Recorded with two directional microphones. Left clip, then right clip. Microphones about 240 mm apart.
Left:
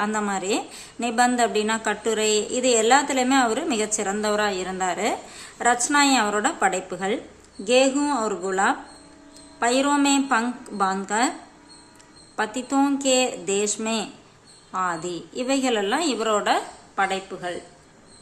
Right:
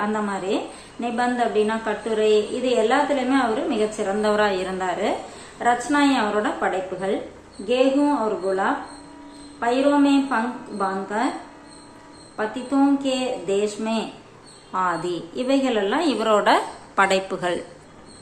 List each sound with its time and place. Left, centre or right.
0.0 s a woman's voice: left
12.4 s a woman's voice: left; by 17.6 s centre